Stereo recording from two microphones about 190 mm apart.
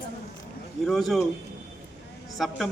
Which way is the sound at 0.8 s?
Centre (ahead or behind).